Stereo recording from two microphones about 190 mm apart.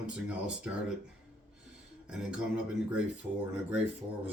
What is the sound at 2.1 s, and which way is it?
Speech, 5° right (ahead or behind).